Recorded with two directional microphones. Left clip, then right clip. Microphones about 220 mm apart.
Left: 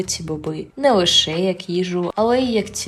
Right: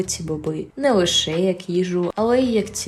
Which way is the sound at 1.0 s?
10° right (ahead or behind).